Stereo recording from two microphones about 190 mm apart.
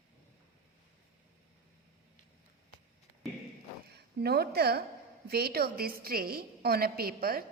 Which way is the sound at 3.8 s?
55° right (ahead or behind).